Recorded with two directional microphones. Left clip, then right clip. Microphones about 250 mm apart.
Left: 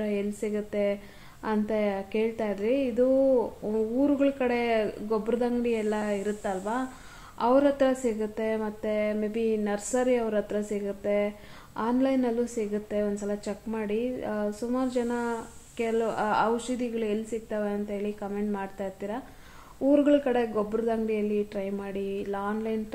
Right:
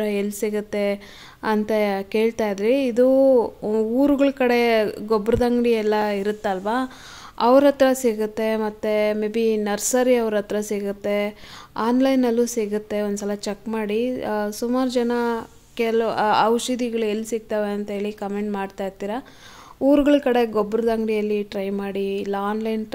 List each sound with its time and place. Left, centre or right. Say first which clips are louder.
0.0 s a woman's voice: right 7 dB; right